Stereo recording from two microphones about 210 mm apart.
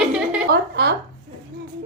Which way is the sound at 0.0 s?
5° right (ahead or behind).